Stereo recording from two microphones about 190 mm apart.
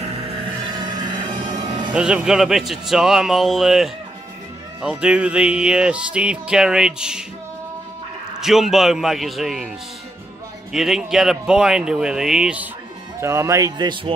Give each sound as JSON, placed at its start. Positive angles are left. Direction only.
{"t": 1.2, "sound": "music", "side_deg": -25}
{"t": 2.0, "sound": "music", "side_deg": -5}
{"t": 8.4, "sound": "music", "side_deg": 0}
{"t": 10.7, "sound": "music", "side_deg": 0}
{"t": 13.2, "sound": "speech", "side_deg": -15}